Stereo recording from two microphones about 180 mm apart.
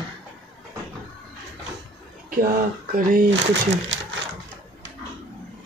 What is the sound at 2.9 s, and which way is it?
Speech, 55° right (ahead or behind).